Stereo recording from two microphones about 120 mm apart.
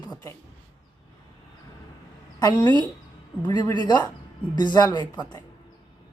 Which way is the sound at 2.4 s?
35° left (ahead or behind).